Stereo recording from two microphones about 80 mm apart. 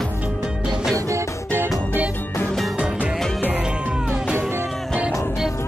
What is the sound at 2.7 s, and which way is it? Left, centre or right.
Music, centre.